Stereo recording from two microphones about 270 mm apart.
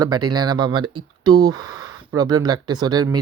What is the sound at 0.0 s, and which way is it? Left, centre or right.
Speech, centre.